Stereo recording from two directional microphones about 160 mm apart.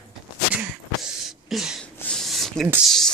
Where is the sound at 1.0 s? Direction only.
Centre (ahead or behind).